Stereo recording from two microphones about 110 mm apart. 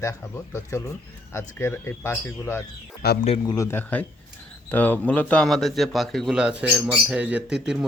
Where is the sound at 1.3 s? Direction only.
25° left (ahead or behind).